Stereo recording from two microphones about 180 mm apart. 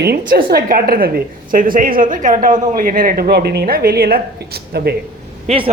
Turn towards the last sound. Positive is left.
turn(degrees=-30)  # may be behind; listen again after turning